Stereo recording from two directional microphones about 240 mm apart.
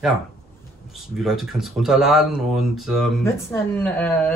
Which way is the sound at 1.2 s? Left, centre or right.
Centre.